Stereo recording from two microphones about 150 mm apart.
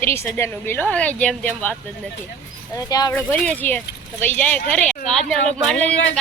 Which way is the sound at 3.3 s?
10° left (ahead or behind).